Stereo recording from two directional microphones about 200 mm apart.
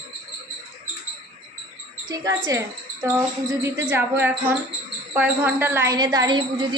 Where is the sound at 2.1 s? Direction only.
15° right (ahead or behind).